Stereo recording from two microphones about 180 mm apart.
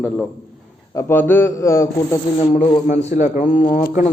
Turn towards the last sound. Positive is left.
turn(degrees=50)  # may be behind; listen again after turning